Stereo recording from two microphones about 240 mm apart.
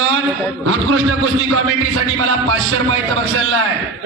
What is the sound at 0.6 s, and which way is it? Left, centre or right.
Speech, right.